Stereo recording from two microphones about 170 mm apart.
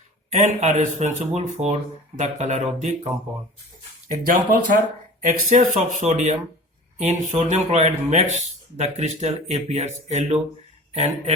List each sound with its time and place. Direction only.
0.3 s speech: 45° right (ahead or behind)
4.3 s speech: 50° right (ahead or behind)